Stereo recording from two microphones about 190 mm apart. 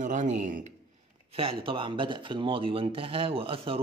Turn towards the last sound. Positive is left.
turn(degrees=-30)  # may be behind; listen again after turning